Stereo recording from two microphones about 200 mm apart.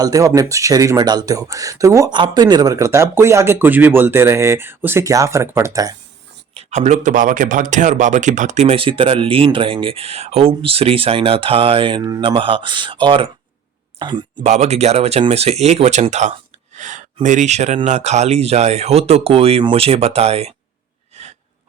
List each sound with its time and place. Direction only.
0.0 s speech: 15° right (ahead or behind)
6.5 s speech: 35° right (ahead or behind)
14.4 s speech: 35° right (ahead or behind)